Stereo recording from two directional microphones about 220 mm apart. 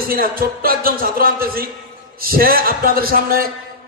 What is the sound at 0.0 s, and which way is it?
A man's voice, 40° right (ahead or behind).